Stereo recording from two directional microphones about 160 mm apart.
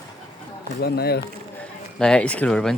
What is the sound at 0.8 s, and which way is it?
Speech, 80° left.